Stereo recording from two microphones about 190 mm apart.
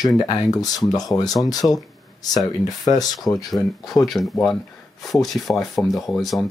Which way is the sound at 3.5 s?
Centre (ahead or behind).